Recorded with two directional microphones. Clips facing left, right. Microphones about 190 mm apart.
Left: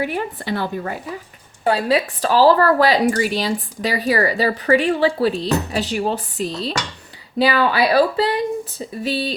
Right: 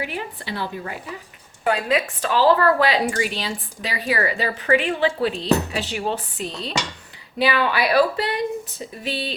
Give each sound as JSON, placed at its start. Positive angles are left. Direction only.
{"t": 0.0, "sound": "speech", "side_deg": 45}
{"t": 1.6, "sound": "a woman's voice", "side_deg": 30}